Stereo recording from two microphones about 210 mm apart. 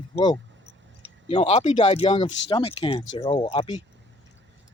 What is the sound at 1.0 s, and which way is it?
Speech, 30° left (ahead or behind).